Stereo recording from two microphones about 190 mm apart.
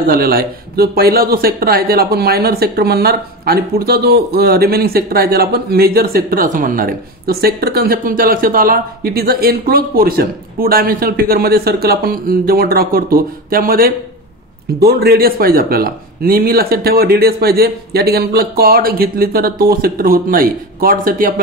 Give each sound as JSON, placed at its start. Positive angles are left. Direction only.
{"t": 0.0, "sound": "speech", "side_deg": -50}